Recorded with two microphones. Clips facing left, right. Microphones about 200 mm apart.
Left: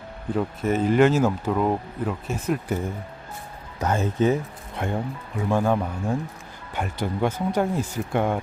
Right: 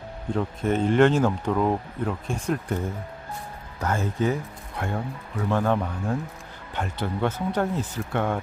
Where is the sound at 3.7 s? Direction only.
20° left (ahead or behind).